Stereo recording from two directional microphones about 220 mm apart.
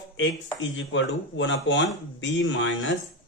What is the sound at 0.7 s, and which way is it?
Speech, 55° left (ahead or behind).